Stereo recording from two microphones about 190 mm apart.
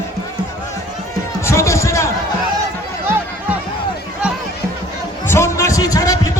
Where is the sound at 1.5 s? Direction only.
15° left (ahead or behind).